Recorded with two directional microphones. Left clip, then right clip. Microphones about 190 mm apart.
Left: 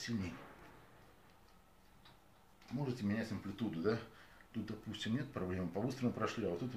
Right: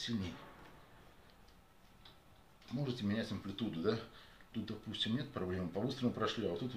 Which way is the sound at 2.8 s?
20° right (ahead or behind).